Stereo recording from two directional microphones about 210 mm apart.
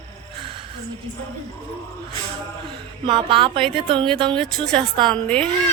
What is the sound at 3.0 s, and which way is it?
Speech, 25° right (ahead or behind).